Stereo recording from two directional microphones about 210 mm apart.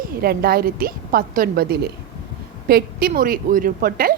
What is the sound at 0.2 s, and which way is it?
A woman's voice, 45° right (ahead or behind).